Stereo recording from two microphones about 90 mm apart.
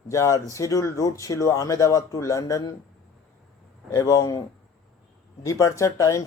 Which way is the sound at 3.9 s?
40° left (ahead or behind).